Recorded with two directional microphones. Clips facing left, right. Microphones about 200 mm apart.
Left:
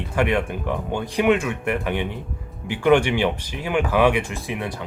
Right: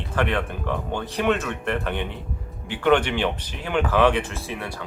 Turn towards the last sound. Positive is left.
turn(degrees=20)  # may be behind; listen again after turning